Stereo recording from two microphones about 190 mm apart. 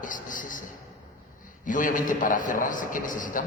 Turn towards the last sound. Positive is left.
turn(degrees=45)  # may be behind; listen again after turning